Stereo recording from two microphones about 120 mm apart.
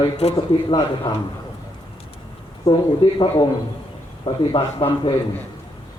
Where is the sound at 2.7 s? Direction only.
40° left (ahead or behind).